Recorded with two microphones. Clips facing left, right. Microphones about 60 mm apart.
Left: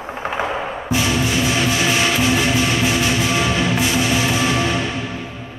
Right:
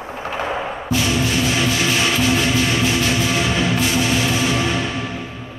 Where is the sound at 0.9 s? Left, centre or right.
Centre.